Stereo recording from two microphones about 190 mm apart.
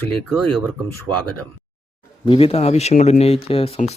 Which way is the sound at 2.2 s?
30° left (ahead or behind).